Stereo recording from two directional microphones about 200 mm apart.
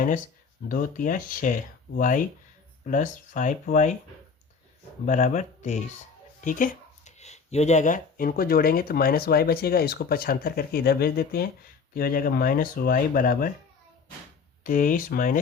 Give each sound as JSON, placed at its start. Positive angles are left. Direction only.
{"t": 0.7, "sound": "speech", "side_deg": 45}
{"t": 5.0, "sound": "speech", "side_deg": 40}
{"t": 14.6, "sound": "speech", "side_deg": 45}